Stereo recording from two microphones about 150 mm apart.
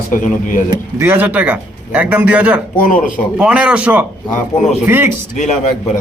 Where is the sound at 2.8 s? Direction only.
60° left (ahead or behind).